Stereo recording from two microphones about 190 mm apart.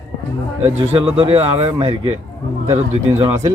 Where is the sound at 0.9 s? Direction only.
30° right (ahead or behind).